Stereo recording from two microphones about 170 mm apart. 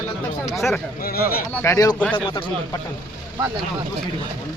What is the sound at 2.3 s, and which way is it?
Speech, 30° left (ahead or behind).